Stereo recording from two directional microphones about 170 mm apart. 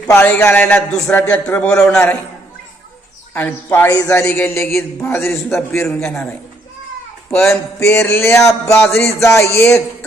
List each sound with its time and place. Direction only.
0.1 s a man's voice: 10° left (ahead or behind)
3.3 s a man's voice: 15° left (ahead or behind)
7.4 s a man's voice: 15° left (ahead or behind)